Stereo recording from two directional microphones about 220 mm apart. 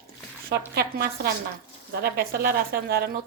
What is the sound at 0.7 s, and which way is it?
A woman's voice, 45° right (ahead or behind).